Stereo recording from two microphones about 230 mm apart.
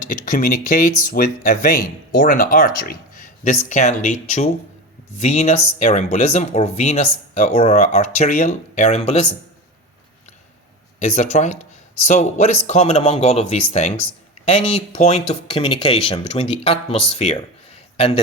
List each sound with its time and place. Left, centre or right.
0.0 s speech: left
11.0 s speech: left
17.2 s a sound: left